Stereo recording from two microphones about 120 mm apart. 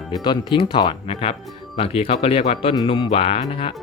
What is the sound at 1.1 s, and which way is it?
Speech, 60° left (ahead or behind).